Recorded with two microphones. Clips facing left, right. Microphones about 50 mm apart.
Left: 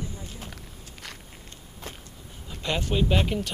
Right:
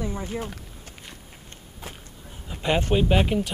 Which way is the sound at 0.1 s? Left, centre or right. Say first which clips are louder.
Right 10 dB; right.